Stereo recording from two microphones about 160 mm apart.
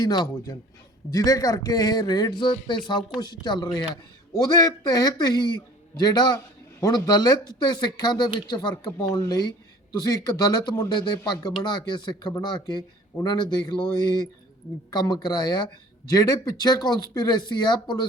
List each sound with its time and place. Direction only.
0.0 s speech: 25° left (ahead or behind)